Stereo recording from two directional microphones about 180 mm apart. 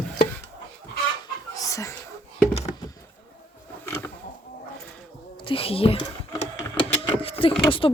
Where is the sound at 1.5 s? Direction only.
20° left (ahead or behind).